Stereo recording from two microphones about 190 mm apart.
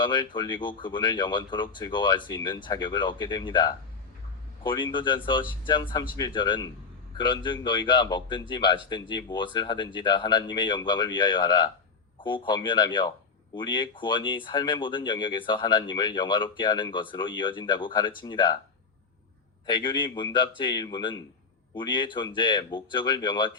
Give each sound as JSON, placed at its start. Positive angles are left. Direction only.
{"t": 0.0, "sound": "speech", "side_deg": 25}
{"t": 19.6, "sound": "speech", "side_deg": 25}